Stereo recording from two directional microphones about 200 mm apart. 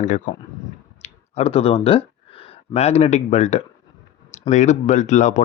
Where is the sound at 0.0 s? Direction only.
40° left (ahead or behind).